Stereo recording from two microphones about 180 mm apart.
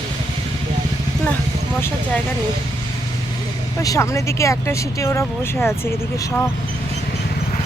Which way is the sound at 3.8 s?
15° left (ahead or behind).